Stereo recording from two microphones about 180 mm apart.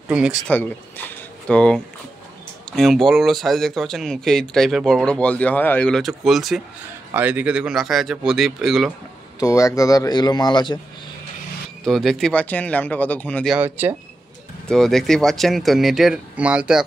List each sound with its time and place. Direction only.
0.1 s speech: 5° right (ahead or behind)
0.5 s speech: 10° left (ahead or behind)
9.4 s a man's voice: 15° left (ahead or behind)
11.8 s speech: centre (ahead or behind)
13.6 s speech: 10° right (ahead or behind)
14.7 s speech: centre (ahead or behind)